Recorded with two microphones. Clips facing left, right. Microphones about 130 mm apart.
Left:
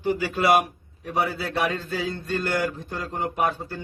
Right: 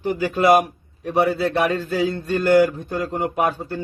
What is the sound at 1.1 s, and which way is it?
Speech, 55° right (ahead or behind).